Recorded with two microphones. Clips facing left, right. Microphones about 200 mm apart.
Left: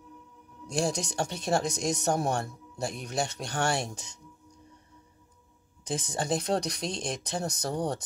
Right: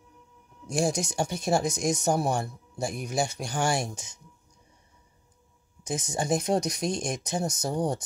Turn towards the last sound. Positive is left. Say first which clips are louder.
# right 2 dB
turn(degrees=-10)  # may be behind; listen again after turning